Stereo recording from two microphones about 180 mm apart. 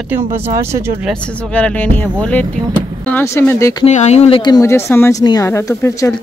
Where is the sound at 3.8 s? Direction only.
40° left (ahead or behind).